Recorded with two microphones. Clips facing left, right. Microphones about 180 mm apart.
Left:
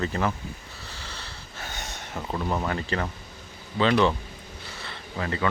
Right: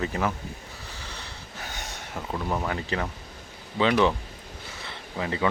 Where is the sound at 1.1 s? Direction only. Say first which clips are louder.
Right 1 dB; 15° right (ahead or behind).